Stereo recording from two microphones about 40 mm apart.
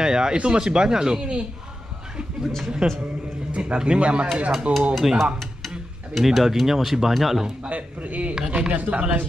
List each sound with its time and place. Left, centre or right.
0.0 s speech: centre
2.8 s a man's voice: centre
3.5 s speech: right
5.0 s speech: centre
7.7 s speech: right